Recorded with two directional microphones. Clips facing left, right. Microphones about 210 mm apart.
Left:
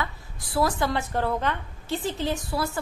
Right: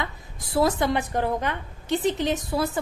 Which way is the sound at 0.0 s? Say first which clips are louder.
Even; 20° right (ahead or behind).